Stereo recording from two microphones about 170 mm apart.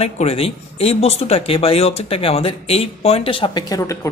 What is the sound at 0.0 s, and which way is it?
Speech, 35° left (ahead or behind).